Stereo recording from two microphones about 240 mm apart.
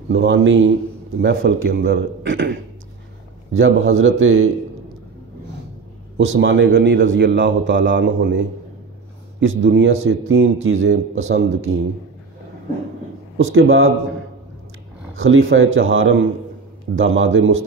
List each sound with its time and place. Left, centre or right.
0.1 s a man's voice: right
1.7 s a man's voice: right
3.5 s speech: right
6.1 s a man's voice: right
11.3 s speech: right
13.4 s speech: right
15.1 s speech: right